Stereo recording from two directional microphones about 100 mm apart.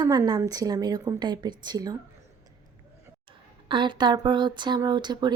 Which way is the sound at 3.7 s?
50° right (ahead or behind).